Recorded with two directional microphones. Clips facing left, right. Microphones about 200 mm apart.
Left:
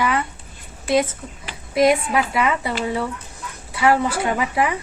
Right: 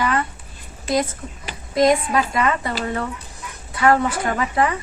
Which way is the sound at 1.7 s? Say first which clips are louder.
Even; 5° left (ahead or behind).